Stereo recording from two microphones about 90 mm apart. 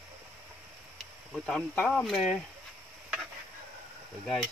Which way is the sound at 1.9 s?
5° left (ahead or behind).